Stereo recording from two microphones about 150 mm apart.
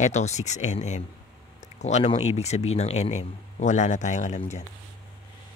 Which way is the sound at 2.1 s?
45° left (ahead or behind).